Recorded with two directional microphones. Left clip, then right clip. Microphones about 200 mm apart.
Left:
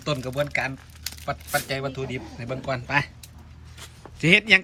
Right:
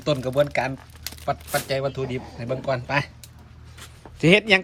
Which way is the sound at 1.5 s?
10° right (ahead or behind).